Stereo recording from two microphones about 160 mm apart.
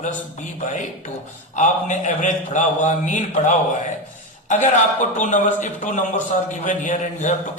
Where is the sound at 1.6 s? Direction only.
50° left (ahead or behind).